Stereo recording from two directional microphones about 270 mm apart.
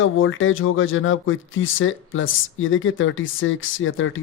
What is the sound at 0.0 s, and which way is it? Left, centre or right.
A man's voice, left.